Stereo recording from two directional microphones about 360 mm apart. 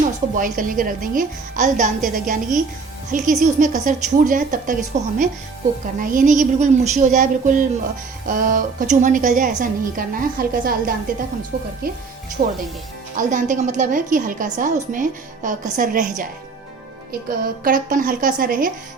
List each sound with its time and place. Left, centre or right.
0.3 s a woman's voice: right
12.4 s a woman's voice: right